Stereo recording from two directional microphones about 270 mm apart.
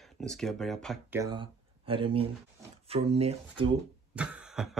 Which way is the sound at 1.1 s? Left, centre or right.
Centre.